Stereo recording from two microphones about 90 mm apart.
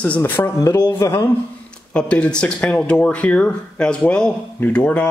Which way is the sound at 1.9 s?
15° left (ahead or behind).